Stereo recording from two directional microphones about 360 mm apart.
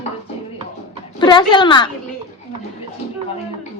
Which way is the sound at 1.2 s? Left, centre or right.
Centre.